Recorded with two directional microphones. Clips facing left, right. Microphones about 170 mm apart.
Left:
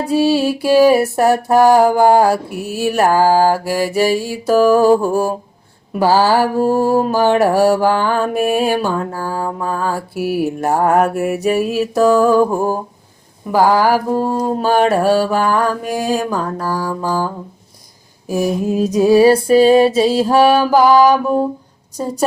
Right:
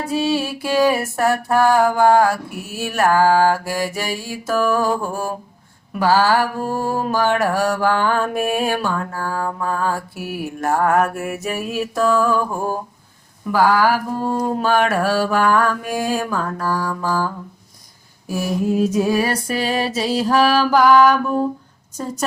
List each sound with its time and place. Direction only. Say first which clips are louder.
0.0 s mantra: left 6 dB; 30° left (ahead or behind)
2.9 s music: left 2 dB; 20° left (ahead or behind)
3.2 s mantra: left 3 dB; 35° left (ahead or behind)
5.9 s music: left 3 dB; 30° left (ahead or behind)
11.4 s mantra: left 8 dB; 30° left (ahead or behind)
13.5 s mantra: left 3 dB; 15° left (ahead or behind)
13.8 s mantra: left 3 dB; 40° left (ahead or behind)
14.2 s music: left 3 dB; 35° left (ahead or behind)
16.0 s mantra: left 4 dB; 20° left (ahead or behind)
16.7 s music: left 3 dB; 30° left (ahead or behind)
19.0 s music: left 10 dB; 30° left (ahead or behind)